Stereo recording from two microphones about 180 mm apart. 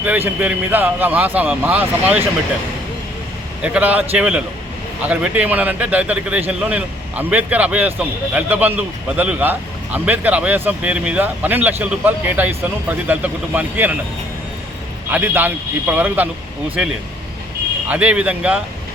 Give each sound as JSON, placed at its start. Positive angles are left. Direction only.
{"t": 0.0, "sound": "a man's voice", "side_deg": -10}
{"t": 3.6, "sound": "a man's voice", "side_deg": -5}
{"t": 15.1, "sound": "a man's voice", "side_deg": -10}
{"t": 17.8, "sound": "a man's voice", "side_deg": -5}